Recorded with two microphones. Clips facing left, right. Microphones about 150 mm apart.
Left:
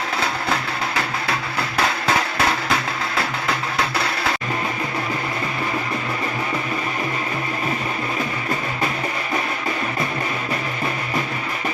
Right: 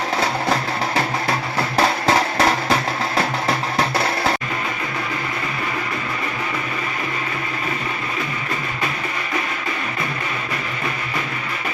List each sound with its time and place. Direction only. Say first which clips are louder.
0.9 s music: right 4 dB; 30° right (ahead or behind)